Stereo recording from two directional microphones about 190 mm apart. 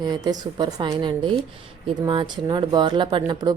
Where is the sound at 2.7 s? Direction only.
25° right (ahead or behind).